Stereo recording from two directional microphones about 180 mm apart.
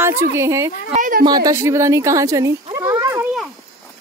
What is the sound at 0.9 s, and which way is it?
Speech, 50° right (ahead or behind).